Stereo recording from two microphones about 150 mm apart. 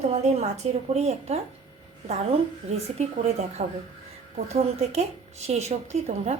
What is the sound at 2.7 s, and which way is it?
A woman's voice, 45° right (ahead or behind).